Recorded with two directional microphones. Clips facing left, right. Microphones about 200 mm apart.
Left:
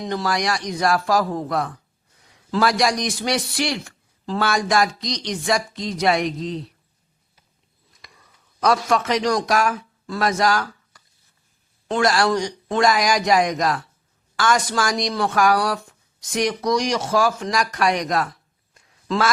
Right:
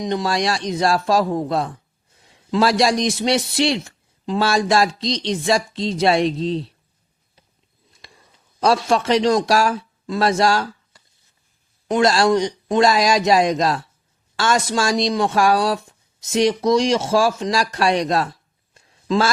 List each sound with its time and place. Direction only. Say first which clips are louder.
0.0 s a man's voice: right 3 dB; 20° right (ahead or behind)
8.0 s a man's voice: right 2 dB; 30° right (ahead or behind)